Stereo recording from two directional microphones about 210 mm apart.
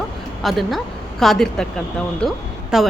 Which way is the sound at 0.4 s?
Centre (ahead or behind).